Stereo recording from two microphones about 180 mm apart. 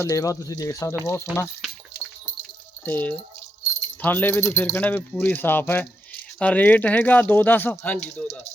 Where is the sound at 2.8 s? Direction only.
10° left (ahead or behind).